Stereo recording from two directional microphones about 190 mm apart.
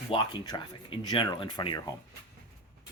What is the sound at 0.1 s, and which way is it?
Speech, 25° left (ahead or behind).